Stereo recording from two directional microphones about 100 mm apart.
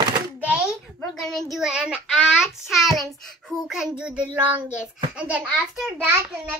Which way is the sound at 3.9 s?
10° right (ahead or behind).